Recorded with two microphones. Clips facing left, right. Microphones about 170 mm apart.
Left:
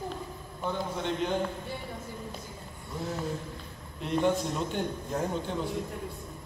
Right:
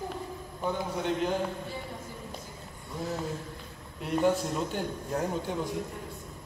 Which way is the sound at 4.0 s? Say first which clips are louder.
Right 1 dB; 5° right (ahead or behind).